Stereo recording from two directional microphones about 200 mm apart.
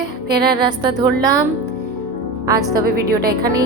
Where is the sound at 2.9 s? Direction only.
50° right (ahead or behind).